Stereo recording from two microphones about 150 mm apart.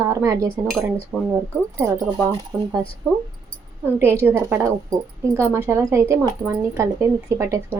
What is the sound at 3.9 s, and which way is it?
A woman's voice, 15° right (ahead or behind).